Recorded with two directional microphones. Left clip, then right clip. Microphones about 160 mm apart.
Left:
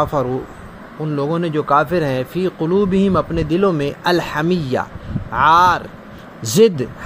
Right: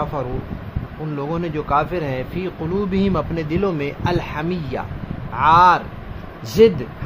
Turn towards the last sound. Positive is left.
turn(degrees=35)  # may be behind; listen again after turning